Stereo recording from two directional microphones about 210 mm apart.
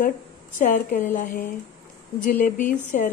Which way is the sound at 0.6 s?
40° left (ahead or behind).